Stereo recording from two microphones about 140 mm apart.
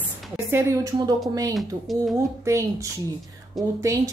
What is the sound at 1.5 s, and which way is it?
Speech, centre (ahead or behind).